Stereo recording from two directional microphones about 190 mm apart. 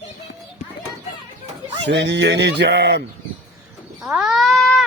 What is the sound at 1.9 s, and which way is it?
Fowl, 65° right (ahead or behind).